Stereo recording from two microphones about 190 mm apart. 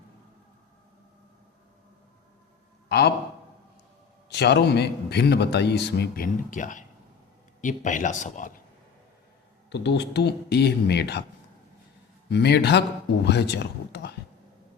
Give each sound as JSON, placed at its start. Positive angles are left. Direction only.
{"t": 2.9, "sound": "a man's voice", "side_deg": 60}
{"t": 4.3, "sound": "a man's voice", "side_deg": 65}
{"t": 9.6, "sound": "a man's voice", "side_deg": 65}
{"t": 12.3, "sound": "a man's voice", "side_deg": 60}